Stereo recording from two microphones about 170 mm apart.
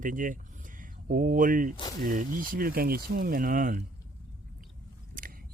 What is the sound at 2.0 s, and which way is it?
Speech, 55° right (ahead or behind).